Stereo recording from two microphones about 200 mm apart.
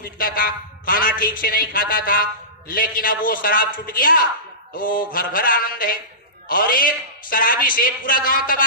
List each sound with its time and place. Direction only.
0.2 s a man's voice: 45° left (ahead or behind)